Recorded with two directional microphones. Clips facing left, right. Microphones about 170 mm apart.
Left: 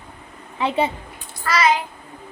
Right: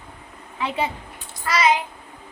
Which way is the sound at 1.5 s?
20° right (ahead or behind).